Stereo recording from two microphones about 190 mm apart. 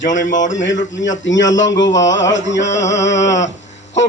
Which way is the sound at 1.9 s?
75° left (ahead or behind).